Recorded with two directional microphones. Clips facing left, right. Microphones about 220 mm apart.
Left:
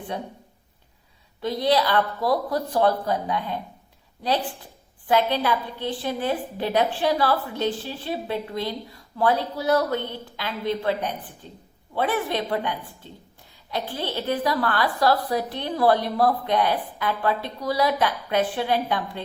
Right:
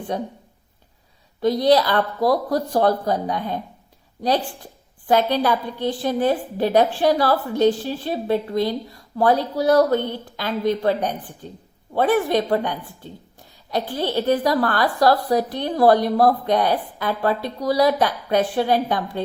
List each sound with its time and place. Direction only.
0.1 s a woman's voice: 40° right (ahead or behind)
1.4 s a woman's voice: 40° right (ahead or behind)
5.0 s a woman's voice: 40° right (ahead or behind)